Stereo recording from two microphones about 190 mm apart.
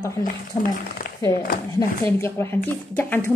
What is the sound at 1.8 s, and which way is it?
A woman's voice, 15° left (ahead or behind).